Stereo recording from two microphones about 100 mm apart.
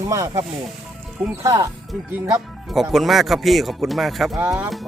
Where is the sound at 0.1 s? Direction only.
35° right (ahead or behind).